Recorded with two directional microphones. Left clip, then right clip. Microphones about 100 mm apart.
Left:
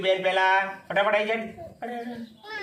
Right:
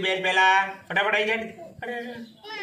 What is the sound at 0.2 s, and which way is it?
A man's voice, 35° left (ahead or behind).